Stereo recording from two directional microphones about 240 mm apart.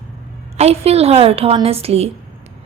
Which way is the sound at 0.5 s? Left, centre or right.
Right.